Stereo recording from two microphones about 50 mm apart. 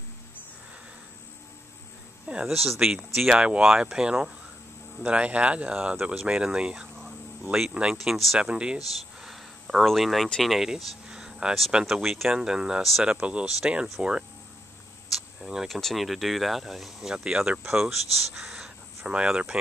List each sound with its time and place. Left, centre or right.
2.4 s speech: centre
2.9 s speech: centre
8.4 s speech: centre
9.2 s a sound: centre
9.8 s speech: centre
10.7 s a sound: centre
11.8 s speech: centre; by 14.1 s right
15.0 s a sound: centre
15.7 s speech: centre
17.6 s speech: centre
18.3 s crow: centre
19.0 s speech: centre